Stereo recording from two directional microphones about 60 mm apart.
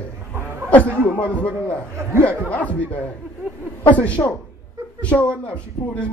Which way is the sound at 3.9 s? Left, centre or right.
Left.